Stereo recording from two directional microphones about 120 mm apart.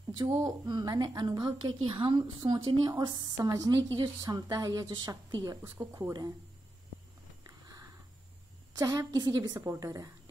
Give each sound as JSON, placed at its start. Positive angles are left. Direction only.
{"t": 0.5, "sound": "a woman's voice", "side_deg": -35}
{"t": 5.6, "sound": "speech", "side_deg": -15}
{"t": 5.9, "sound": "speech", "side_deg": -30}
{"t": 7.4, "sound": "a sound", "side_deg": -30}
{"t": 8.7, "sound": "a woman's voice", "side_deg": -30}
{"t": 9.6, "sound": "a woman's voice", "side_deg": -25}